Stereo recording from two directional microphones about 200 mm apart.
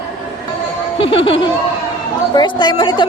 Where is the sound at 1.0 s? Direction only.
30° left (ahead or behind).